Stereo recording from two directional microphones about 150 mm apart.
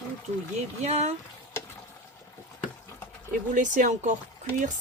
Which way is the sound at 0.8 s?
50° right (ahead or behind).